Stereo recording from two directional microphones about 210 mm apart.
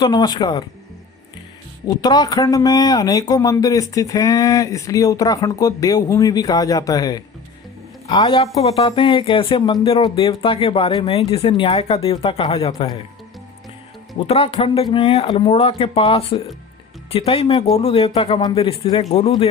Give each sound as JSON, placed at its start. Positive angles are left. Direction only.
{"t": 0.0, "sound": "speech", "side_deg": 20}
{"t": 2.0, "sound": "a man's voice", "side_deg": 20}
{"t": 14.3, "sound": "speech", "side_deg": 25}